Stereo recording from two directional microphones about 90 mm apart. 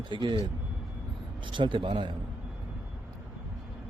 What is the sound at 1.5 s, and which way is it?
Speech, 65° right (ahead or behind).